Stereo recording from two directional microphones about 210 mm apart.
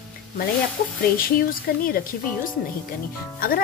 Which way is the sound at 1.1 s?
45° left (ahead or behind).